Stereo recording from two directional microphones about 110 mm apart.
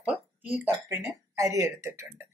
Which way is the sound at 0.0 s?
10° right (ahead or behind).